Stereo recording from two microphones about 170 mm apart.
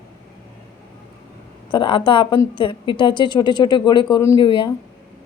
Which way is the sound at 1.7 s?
30° left (ahead or behind).